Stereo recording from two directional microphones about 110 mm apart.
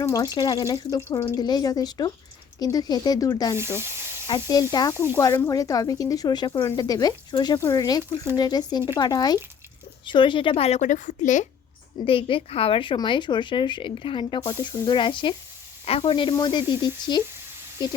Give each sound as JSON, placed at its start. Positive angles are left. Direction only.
{"t": 0.0, "sound": "speech", "side_deg": 35}
{"t": 3.6, "sound": "a sound", "side_deg": -25}
{"t": 4.3, "sound": "speech", "side_deg": 35}
{"t": 5.1, "sound": "a woman's voice", "side_deg": 25}
{"t": 12.0, "sound": "a woman's voice", "side_deg": 55}
{"t": 15.9, "sound": "a woman's voice", "side_deg": 60}